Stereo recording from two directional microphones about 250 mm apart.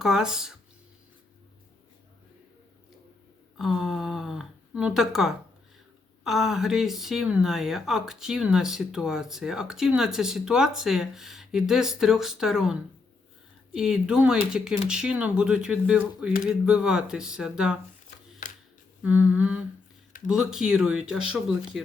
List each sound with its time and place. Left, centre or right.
0.0 s speech: centre
3.6 s speech: centre
13.7 s speech: centre
19.0 s speech: centre